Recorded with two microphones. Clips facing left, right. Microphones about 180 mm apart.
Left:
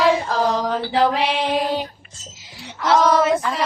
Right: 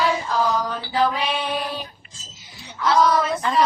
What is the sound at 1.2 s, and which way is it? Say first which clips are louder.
Female singing: left 5 dB; 85° left.